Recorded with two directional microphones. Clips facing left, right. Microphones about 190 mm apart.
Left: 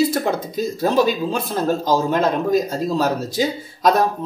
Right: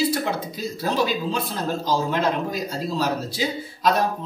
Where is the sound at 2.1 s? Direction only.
45° left (ahead or behind).